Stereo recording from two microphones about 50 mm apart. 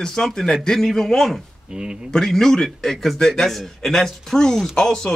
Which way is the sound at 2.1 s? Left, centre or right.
Centre.